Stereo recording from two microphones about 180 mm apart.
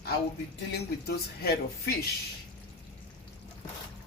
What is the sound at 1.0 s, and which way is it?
Speech, 60° left (ahead or behind).